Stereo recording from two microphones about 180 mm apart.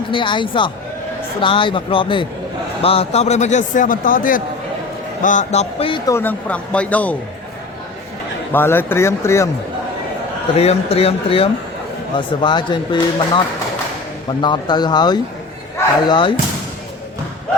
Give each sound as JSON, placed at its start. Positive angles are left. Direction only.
{"t": 0.1, "sound": "a man's voice", "side_deg": 25}
{"t": 6.1, "sound": "speech", "side_deg": 10}
{"t": 8.5, "sound": "speech", "side_deg": 10}
{"t": 10.6, "sound": "a man's voice", "side_deg": 35}